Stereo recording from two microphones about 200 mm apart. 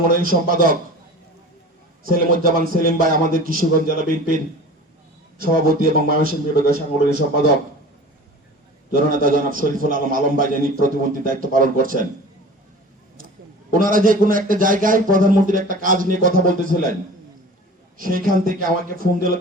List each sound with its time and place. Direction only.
0.2 s a man's voice: 45° right (ahead or behind)
2.1 s a man's voice: 45° right (ahead or behind)
5.4 s a man's voice: 45° right (ahead or behind)
9.0 s a man's voice: 45° right (ahead or behind)
13.7 s a man's voice: 45° right (ahead or behind)
17.9 s a man's voice: 45° right (ahead or behind)